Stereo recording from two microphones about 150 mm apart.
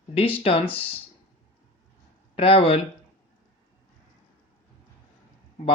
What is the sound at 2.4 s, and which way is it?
Speech, 40° left (ahead or behind).